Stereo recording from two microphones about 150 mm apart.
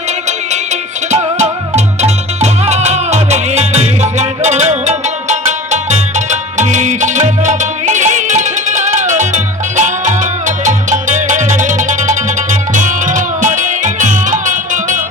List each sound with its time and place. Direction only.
0.3 s music: 50° right (ahead or behind)